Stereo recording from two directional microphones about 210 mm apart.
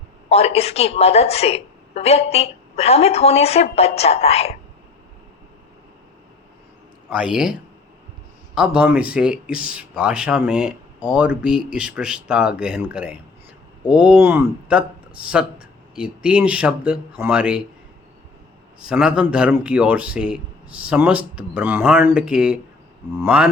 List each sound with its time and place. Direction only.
0.3 s a woman's voice: 30° left (ahead or behind)
7.1 s speech: 5° right (ahead or behind)
8.5 s speech: 5° right (ahead or behind)
18.8 s speech: 5° right (ahead or behind)
23.2 s a sound: 5° right (ahead or behind)